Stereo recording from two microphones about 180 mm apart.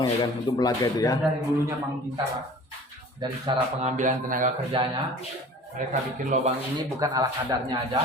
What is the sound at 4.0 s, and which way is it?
Speech, 45° right (ahead or behind).